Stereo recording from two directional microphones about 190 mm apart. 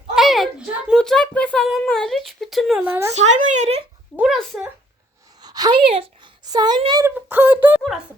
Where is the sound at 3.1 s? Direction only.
40° right (ahead or behind).